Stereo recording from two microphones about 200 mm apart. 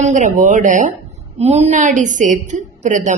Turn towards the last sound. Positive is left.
turn(degrees=-40)  # may be behind; listen again after turning